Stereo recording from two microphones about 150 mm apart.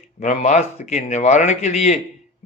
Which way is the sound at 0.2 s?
50° left (ahead or behind).